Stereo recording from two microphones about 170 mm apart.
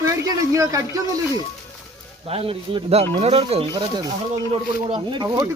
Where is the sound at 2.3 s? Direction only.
35° right (ahead or behind).